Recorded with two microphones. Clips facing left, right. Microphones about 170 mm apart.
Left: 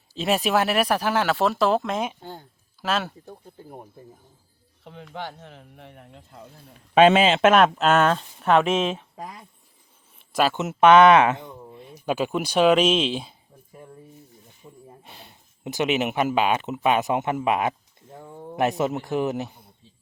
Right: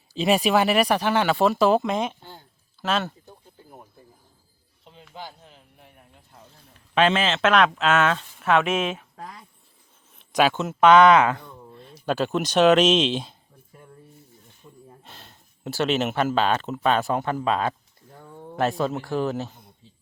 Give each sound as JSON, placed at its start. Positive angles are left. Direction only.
{"t": 0.1, "sound": "speech", "side_deg": 0}
{"t": 4.8, "sound": "speech", "side_deg": 70}
{"t": 7.4, "sound": "speech", "side_deg": 45}
{"t": 9.1, "sound": "speech", "side_deg": 15}
{"t": 10.2, "sound": "a sound", "side_deg": 5}
{"t": 10.5, "sound": "speech", "side_deg": 20}
{"t": 14.6, "sound": "a sound", "side_deg": 10}
{"t": 16.8, "sound": "speech", "side_deg": 15}